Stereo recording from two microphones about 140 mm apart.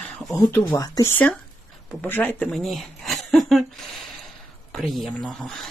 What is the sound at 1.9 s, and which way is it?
Speech, 10° left (ahead or behind).